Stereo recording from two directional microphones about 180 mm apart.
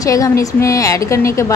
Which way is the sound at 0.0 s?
20° left (ahead or behind).